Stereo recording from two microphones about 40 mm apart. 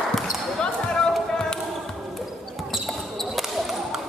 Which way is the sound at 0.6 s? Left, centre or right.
Centre.